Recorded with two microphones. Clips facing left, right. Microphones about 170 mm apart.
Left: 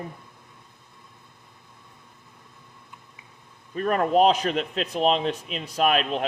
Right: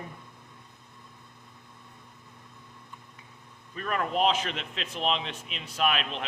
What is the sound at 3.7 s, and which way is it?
Speech, 40° left (ahead or behind).